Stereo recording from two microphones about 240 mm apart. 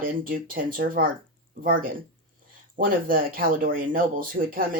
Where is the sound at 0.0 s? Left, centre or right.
Right.